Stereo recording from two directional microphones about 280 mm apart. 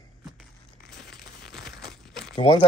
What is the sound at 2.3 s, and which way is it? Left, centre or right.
Speech, left.